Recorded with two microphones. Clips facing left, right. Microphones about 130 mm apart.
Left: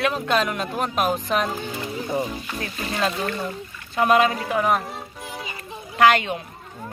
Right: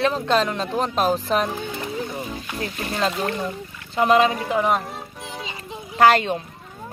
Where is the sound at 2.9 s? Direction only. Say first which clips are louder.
Right 1 dB; 25° right (ahead or behind).